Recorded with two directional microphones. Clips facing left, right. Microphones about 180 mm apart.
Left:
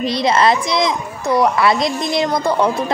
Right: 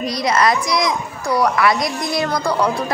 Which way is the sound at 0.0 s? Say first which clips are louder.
Left 2 dB; 25° left (ahead or behind).